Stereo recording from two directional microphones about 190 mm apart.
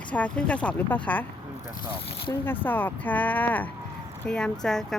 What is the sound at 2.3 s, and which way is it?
Speech, 10° left (ahead or behind).